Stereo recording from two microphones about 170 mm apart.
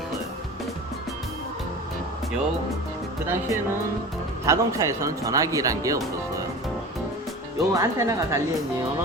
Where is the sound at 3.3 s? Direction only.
15° right (ahead or behind).